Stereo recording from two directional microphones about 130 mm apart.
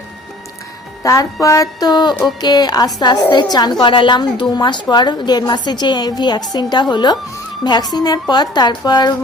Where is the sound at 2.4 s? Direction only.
30° left (ahead or behind).